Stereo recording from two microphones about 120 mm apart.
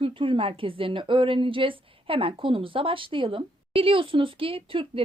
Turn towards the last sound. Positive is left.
turn(degrees=-50)  # may be behind; listen again after turning